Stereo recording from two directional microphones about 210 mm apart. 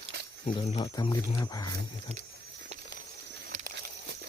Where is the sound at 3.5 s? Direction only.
40° right (ahead or behind).